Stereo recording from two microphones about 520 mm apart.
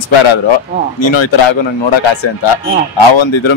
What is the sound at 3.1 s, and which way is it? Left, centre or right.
Speech, left.